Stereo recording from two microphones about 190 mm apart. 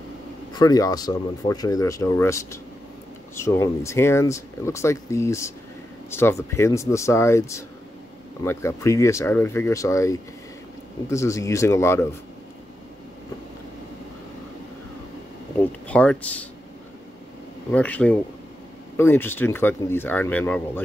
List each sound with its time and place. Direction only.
0.5 s speech: 20° left (ahead or behind)
15.9 s speech: 5° left (ahead or behind)
17.6 s speech: 5° left (ahead or behind)